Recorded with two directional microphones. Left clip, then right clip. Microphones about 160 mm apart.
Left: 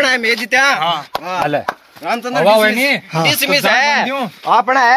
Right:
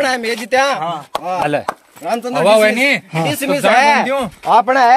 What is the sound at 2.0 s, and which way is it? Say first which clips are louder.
Speech: even; 35° right (ahead or behind).